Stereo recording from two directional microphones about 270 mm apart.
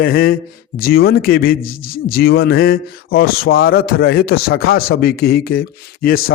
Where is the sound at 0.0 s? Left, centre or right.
Left.